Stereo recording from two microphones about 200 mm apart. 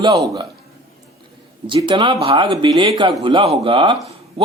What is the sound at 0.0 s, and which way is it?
Speech, 20° right (ahead or behind).